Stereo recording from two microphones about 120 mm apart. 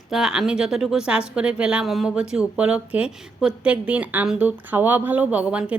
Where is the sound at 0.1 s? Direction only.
5° right (ahead or behind).